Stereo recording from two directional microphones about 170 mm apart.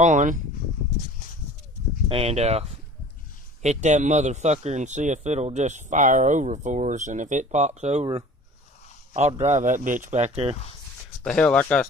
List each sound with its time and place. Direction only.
0.0 s a man's voice: 45° right (ahead or behind)
2.0 s a man's voice: 35° right (ahead or behind)
9.1 s a man's voice: 40° right (ahead or behind)
11.2 s speech: 5° left (ahead or behind)